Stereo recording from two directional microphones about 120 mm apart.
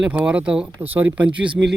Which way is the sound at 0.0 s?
10° right (ahead or behind).